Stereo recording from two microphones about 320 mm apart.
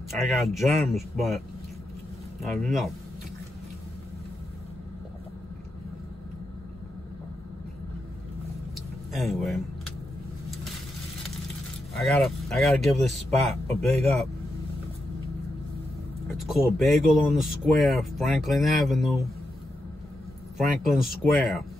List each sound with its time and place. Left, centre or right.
0.1 s speech: centre
2.4 s speech: centre
9.1 s speech: centre
12.0 s speech: centre
16.3 s speech: centre
20.5 s speech: centre